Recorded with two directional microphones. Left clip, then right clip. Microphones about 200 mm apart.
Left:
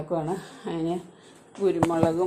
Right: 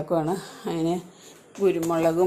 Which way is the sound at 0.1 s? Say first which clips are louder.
Right 3 dB; 20° right (ahead or behind).